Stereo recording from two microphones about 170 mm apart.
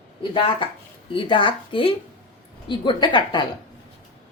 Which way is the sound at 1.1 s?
30° left (ahead or behind).